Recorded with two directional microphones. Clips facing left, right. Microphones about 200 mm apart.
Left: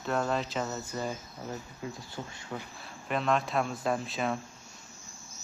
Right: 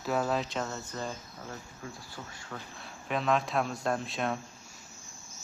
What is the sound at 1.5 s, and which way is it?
Speech, 20° left (ahead or behind).